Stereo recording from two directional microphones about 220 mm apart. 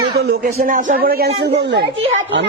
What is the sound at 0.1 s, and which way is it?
A man's voice, 45° right (ahead or behind).